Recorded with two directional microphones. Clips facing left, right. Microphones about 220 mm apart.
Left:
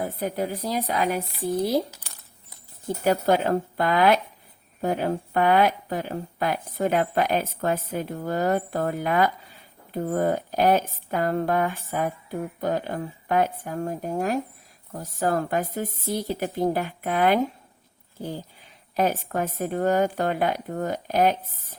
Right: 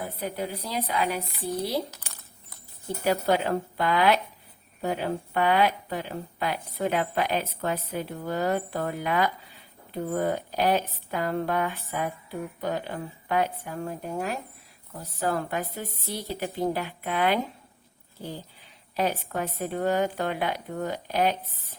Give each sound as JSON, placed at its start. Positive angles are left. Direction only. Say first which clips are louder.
{"t": 0.0, "sound": "speech", "louder": "left 5 dB", "side_deg": 45}
{"t": 3.0, "sound": "speech", "louder": "left 3 dB", "side_deg": 45}
{"t": 18.9, "sound": "speech", "louder": "left 3 dB", "side_deg": 45}